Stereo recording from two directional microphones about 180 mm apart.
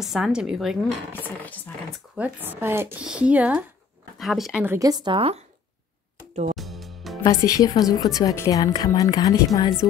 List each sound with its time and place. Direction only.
0.0 s a woman's voice: centre (ahead or behind)
2.1 s a woman's voice: 10° right (ahead or behind)
4.7 s speech: 20° right (ahead or behind)
6.5 s music: centre (ahead or behind)
7.2 s a woman's voice: 20° left (ahead or behind)